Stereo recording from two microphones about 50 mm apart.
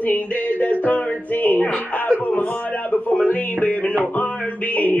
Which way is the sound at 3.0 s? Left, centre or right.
Left.